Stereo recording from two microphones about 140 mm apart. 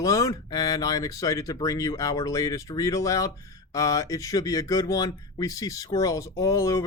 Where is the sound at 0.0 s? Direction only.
25° left (ahead or behind).